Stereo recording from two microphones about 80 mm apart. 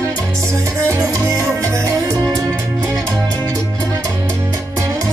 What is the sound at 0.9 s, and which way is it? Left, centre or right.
Music, right.